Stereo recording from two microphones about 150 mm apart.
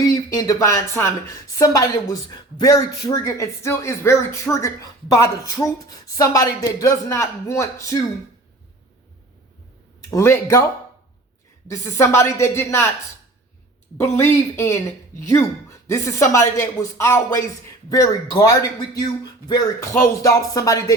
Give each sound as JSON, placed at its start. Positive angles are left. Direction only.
{"t": 0.0, "sound": "speech", "side_deg": 25}
{"t": 10.1, "sound": "speech", "side_deg": 20}
{"t": 11.7, "sound": "speech", "side_deg": 20}
{"t": 14.0, "sound": "speech", "side_deg": 15}